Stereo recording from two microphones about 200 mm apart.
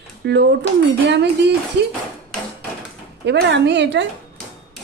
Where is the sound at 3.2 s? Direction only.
60° right (ahead or behind).